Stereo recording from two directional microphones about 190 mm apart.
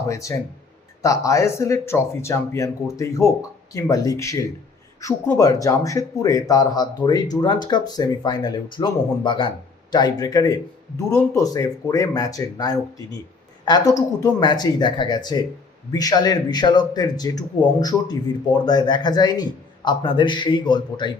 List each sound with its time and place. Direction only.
0.1 s a man's voice: 15° left (ahead or behind)